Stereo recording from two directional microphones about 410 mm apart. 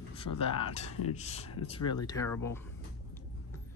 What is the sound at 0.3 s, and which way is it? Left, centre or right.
Speech, left.